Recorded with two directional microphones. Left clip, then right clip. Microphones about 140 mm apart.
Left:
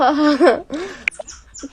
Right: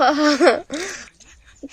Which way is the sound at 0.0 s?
20° right (ahead or behind).